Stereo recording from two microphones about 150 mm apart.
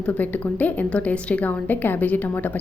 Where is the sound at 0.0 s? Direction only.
10° left (ahead or behind).